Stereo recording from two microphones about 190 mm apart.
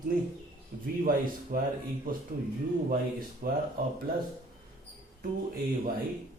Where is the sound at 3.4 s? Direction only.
50° right (ahead or behind).